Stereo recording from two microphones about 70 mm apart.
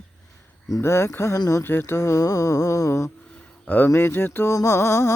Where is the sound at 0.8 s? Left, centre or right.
Left.